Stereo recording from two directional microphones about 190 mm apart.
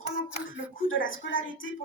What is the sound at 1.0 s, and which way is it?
Speech, 45° left (ahead or behind).